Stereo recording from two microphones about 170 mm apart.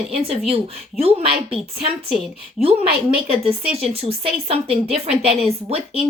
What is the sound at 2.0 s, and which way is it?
Speech, centre (ahead or behind).